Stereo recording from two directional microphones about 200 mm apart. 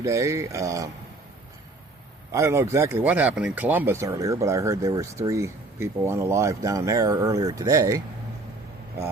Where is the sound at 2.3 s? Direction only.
15° right (ahead or behind).